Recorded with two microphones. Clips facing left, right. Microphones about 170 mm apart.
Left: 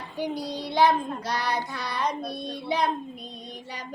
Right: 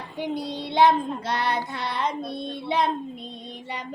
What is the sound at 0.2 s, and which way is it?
Child singing, 25° right (ahead or behind).